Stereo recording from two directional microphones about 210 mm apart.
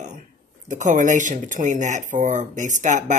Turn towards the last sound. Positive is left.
turn(degrees=-35)  # may be behind; listen again after turning